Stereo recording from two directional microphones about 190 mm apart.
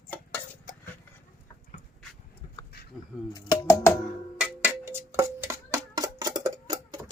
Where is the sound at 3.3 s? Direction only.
20° left (ahead or behind).